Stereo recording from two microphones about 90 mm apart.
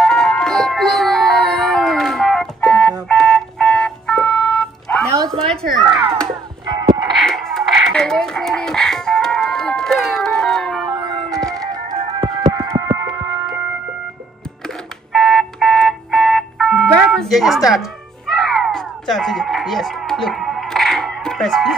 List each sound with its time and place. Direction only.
0.0 s music: 5° left (ahead or behind)
5.4 s a sound: 5° left (ahead or behind)
6.7 s music: 55° right (ahead or behind)
7.2 s music: 5° left (ahead or behind)
10.9 s music: 50° right (ahead or behind)
12.0 s music: 90° right
12.3 s music: 50° right (ahead or behind)
12.7 s music: 40° right (ahead or behind)
15.1 s music: 5° left (ahead or behind)